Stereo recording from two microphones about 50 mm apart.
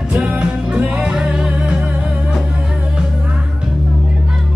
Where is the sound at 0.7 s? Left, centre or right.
Right.